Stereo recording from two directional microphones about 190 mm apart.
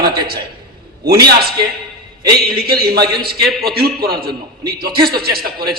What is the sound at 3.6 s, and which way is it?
A man's voice, 55° right (ahead or behind).